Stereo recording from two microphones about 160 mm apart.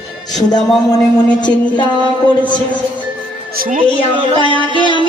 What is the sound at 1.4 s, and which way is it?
Speech, 30° left (ahead or behind).